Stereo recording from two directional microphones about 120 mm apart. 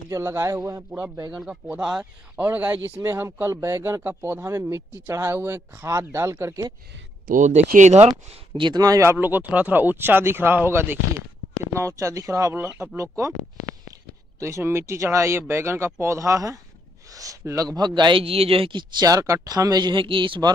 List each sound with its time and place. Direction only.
0.1 s a man's voice: 25° right (ahead or behind)
1.3 s a man's voice: 5° right (ahead or behind); by 6.7 s 25° right (ahead or behind)
7.3 s speech: 90° right
8.1 s a man's voice: 35° right (ahead or behind)
14.4 s a man's voice: 20° right (ahead or behind)
17.1 s a sound: 30° right (ahead or behind)
17.7 s speech: 40° right (ahead or behind)